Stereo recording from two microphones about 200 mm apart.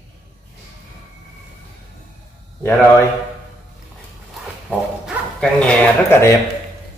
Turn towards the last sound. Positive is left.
turn(degrees=10)  # may be behind; listen again after turning